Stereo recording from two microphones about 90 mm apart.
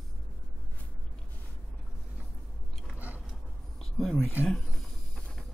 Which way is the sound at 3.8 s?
5° left (ahead or behind).